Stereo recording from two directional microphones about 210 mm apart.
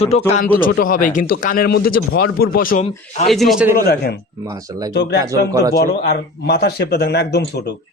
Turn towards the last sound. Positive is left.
turn(degrees=50)  # may be behind; listen again after turning